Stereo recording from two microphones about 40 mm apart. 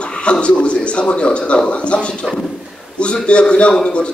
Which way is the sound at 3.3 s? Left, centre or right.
Left.